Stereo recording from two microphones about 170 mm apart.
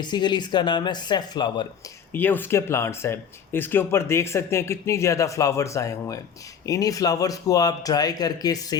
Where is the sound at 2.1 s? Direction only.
10° left (ahead or behind).